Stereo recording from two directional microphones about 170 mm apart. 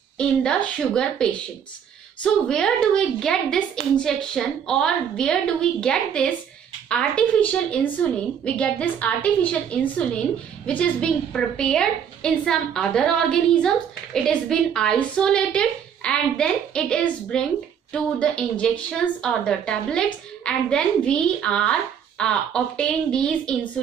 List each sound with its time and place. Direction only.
0.2 s a woman's voice: 5° left (ahead or behind)
10.8 s a woman's voice: 5° left (ahead or behind)